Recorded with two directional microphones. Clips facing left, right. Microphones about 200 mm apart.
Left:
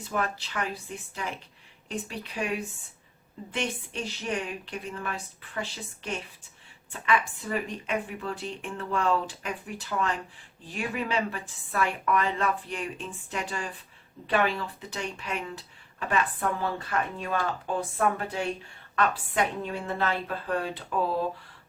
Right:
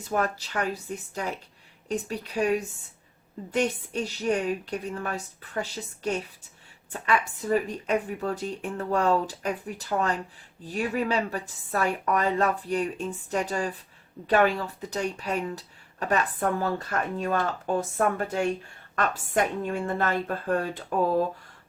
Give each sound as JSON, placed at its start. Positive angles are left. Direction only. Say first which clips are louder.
{"t": 0.1, "sound": "speech", "louder": "right 4 dB", "side_deg": -40}
{"t": 3.5, "sound": "a woman's voice", "louder": "right 6 dB", "side_deg": -40}